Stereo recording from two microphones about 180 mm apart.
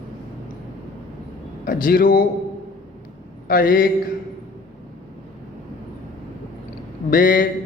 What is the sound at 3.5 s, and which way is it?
Speech, 50° left (ahead or behind).